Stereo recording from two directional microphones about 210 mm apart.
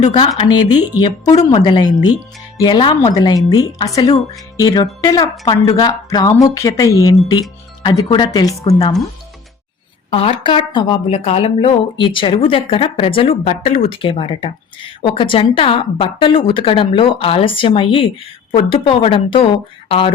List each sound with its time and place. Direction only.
0.1 s speech: 25° left (ahead or behind)
10.1 s a woman's voice: 25° left (ahead or behind)